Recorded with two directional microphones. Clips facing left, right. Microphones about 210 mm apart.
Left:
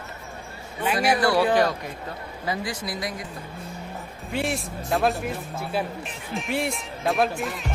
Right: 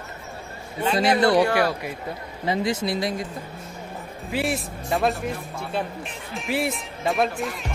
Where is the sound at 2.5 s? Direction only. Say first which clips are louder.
Right 6 dB; 25° right (ahead or behind).